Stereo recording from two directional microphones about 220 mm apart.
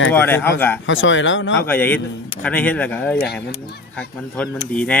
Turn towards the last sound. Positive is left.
turn(degrees=5)  # may be behind; listen again after turning